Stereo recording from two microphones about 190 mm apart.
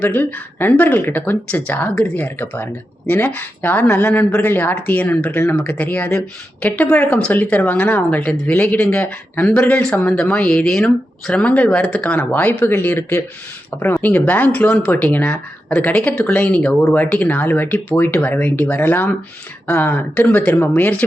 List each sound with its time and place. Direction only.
0.0 s speech: 10° left (ahead or behind)